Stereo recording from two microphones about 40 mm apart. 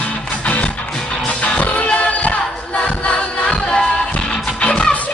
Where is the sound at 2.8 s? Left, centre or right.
Left.